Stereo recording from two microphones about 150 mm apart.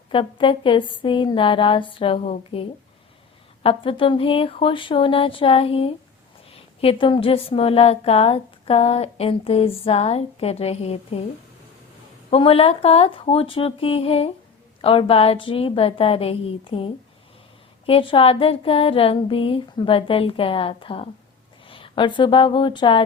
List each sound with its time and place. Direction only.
0.1 s a woman's voice: 35° left (ahead or behind)
12.3 s a woman's voice: 40° left (ahead or behind)